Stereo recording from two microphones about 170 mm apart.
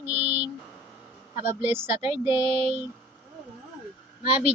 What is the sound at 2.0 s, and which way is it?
Speech, 30° left (ahead or behind).